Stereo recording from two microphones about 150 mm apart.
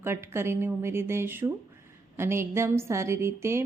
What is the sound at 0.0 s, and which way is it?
Speech, 15° right (ahead or behind).